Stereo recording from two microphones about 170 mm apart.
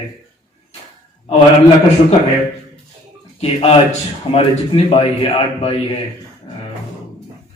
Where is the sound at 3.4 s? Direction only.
35° left (ahead or behind).